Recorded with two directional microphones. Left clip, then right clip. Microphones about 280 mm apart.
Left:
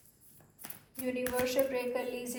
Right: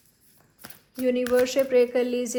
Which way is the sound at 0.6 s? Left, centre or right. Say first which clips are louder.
Right 12 dB; right.